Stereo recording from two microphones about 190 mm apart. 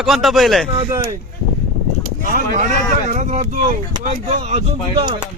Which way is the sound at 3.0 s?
40° right (ahead or behind).